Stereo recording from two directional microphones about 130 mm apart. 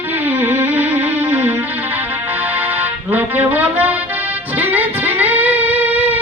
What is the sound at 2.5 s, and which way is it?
Music, 15° right (ahead or behind).